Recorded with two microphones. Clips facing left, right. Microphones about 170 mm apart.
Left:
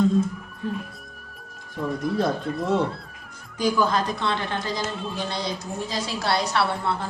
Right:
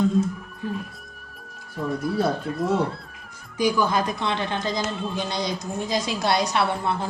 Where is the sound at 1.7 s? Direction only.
5° right (ahead or behind).